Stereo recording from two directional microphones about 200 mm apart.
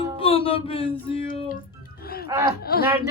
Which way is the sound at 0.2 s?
25° left (ahead or behind).